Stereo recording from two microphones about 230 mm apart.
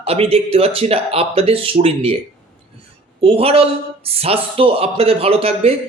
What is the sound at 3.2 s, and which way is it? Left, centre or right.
A man's voice, right.